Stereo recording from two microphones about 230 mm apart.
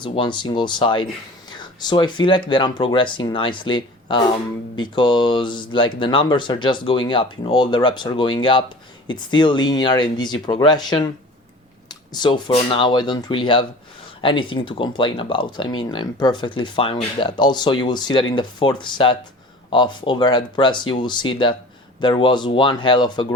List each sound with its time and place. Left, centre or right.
0.0 s speech: left